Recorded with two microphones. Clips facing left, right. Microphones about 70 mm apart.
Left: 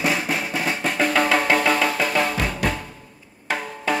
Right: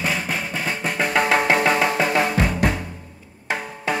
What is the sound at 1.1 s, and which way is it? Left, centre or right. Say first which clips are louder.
Music: right 2 dB; centre.